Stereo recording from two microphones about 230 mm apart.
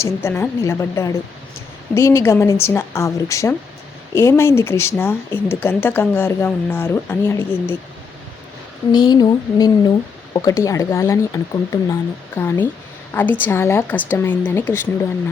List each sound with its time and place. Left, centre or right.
0.0 s speech: centre
8.9 s speech: centre